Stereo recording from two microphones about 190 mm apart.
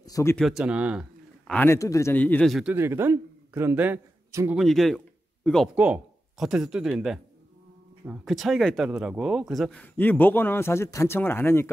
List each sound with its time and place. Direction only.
0.0 s a sound: 15° left (ahead or behind)
0.4 s speech: centre (ahead or behind)
1.5 s speech: 10° left (ahead or behind)
2.7 s a man's voice: 10° right (ahead or behind)
4.6 s speech: centre (ahead or behind)